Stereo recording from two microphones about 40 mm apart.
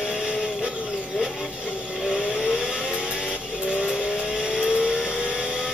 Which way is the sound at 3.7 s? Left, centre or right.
Right.